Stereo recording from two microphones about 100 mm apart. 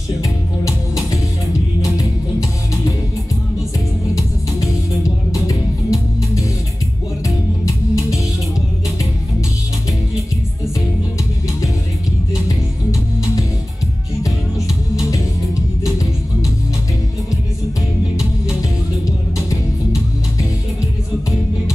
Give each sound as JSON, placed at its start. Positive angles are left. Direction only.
{"t": 5.3, "sound": "music", "side_deg": 35}